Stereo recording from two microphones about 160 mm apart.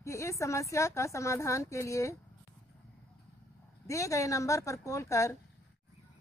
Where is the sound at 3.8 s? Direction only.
20° left (ahead or behind).